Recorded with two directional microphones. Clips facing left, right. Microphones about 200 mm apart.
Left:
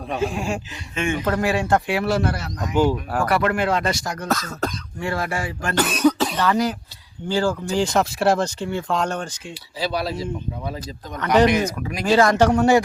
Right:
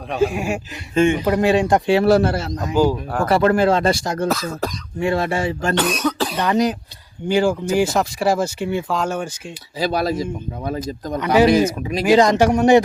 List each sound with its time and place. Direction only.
0.1 s speech: 5° right (ahead or behind)
0.9 s speech: 25° right (ahead or behind)
1.2 s speech: 15° right (ahead or behind)
1.9 s speech: 30° right (ahead or behind)
4.3 s speech: centre (ahead or behind)
4.9 s speech: 20° right (ahead or behind)
5.7 s speech: 5° left (ahead or behind)
6.3 s speech: 20° right (ahead or behind)
7.8 s speech: centre (ahead or behind)
8.5 s speech: 15° right (ahead or behind)
8.9 s speech: 5° right (ahead or behind)
9.7 s speech: 50° right (ahead or behind)
11.8 s speech: 20° right (ahead or behind)